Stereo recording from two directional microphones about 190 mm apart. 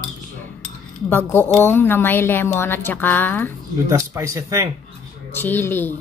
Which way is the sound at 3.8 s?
15° right (ahead or behind).